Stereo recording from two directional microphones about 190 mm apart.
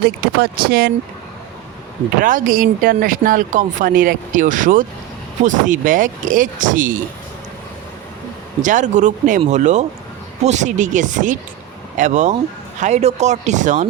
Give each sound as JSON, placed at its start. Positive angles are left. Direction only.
{"t": 0.4, "sound": "speech", "side_deg": -55}
{"t": 2.2, "sound": "speech", "side_deg": -45}
{"t": 8.6, "sound": "speech", "side_deg": -40}